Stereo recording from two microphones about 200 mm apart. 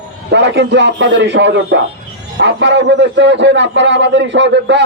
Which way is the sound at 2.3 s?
60° right (ahead or behind).